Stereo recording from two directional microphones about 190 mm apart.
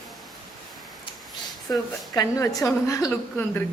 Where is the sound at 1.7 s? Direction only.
20° left (ahead or behind).